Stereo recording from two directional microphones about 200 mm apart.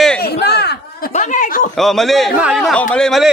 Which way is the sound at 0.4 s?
55° left (ahead or behind).